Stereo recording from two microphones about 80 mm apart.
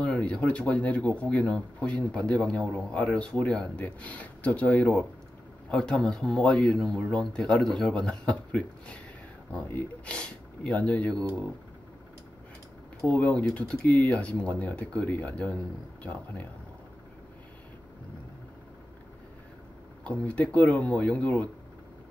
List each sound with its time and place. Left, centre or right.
0.0 s speech: centre
5.7 s speech: centre
13.0 s speech: centre
20.0 s speech: centre